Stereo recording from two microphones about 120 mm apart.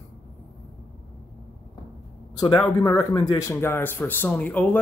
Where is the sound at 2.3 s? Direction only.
35° left (ahead or behind).